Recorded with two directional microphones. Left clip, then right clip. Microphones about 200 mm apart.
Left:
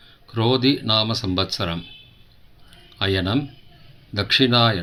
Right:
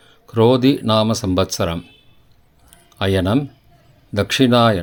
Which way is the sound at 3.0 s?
50° right (ahead or behind).